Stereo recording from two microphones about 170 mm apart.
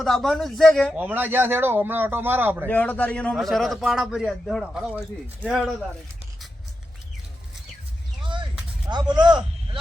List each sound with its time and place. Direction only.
0.0 s a man's voice: centre (ahead or behind)
0.9 s a man's voice: 10° right (ahead or behind)
2.6 s a man's voice: 10° left (ahead or behind)
8.2 s a sound: 30° right (ahead or behind)
8.9 s a man's voice: 25° right (ahead or behind)